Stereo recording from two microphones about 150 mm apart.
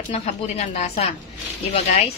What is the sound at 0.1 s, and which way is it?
Speech, 45° left (ahead or behind).